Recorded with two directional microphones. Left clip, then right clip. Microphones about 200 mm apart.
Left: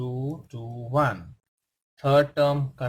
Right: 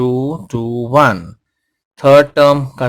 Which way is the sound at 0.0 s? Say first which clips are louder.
Right 17 dB; 55° right (ahead or behind).